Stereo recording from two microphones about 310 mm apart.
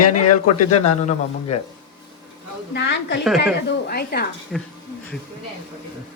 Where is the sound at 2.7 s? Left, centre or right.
Left.